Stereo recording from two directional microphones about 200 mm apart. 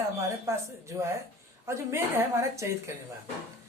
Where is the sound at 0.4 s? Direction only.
15° right (ahead or behind).